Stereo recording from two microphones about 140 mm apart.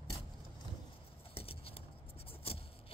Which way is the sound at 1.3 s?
45° left (ahead or behind).